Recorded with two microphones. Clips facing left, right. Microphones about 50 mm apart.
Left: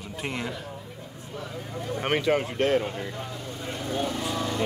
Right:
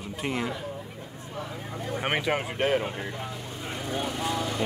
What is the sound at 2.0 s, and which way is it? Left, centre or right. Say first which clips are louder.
Speech: left 3 dB; centre.